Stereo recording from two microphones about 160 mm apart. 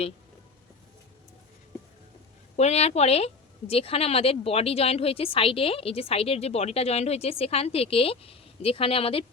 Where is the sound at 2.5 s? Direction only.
40° left (ahead or behind).